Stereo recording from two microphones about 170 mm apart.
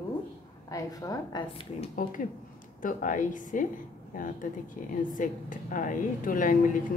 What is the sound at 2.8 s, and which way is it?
A woman's voice, 50° left (ahead or behind).